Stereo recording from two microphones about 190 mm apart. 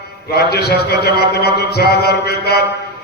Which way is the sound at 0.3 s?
55° left (ahead or behind).